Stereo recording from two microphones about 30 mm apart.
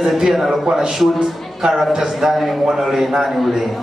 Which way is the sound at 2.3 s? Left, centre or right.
Centre.